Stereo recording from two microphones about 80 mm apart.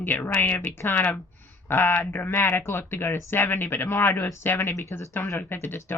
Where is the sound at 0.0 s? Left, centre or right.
Left.